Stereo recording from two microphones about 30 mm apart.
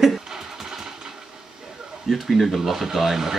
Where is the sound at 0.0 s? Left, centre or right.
Centre.